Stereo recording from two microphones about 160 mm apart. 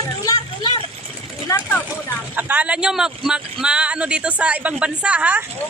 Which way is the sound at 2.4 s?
10° right (ahead or behind).